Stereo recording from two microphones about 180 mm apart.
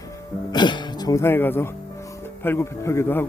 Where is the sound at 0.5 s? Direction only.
25° left (ahead or behind).